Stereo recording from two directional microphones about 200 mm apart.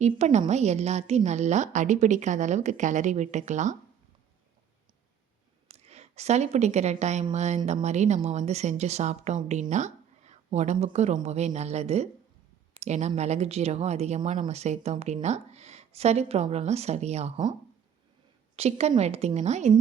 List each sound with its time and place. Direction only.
0.0 s a woman's voice: 35° right (ahead or behind)
5.6 s a sound: 30° right (ahead or behind)
7.0 s a woman's voice: 35° right (ahead or behind)
18.5 s a woman's voice: 30° right (ahead or behind)